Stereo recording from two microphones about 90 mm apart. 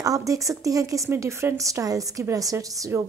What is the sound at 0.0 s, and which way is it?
A woman's voice, 40° right (ahead or behind).